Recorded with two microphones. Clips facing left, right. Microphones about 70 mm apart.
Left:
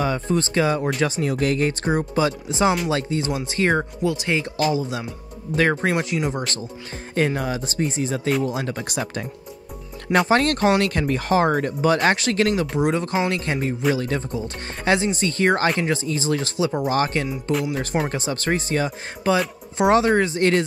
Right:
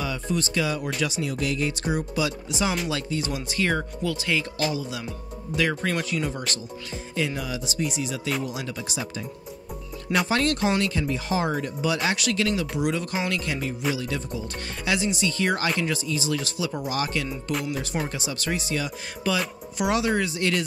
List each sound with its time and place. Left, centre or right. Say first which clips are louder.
0.0 s speech: left 6 dB; left
5.9 s speech: left 4 dB; left
7.2 s speech: left 6 dB; left
10.1 s speech: left 5 dB; left
17.5 s speech: left 6 dB; left
18.0 s speech: left 6 dB; left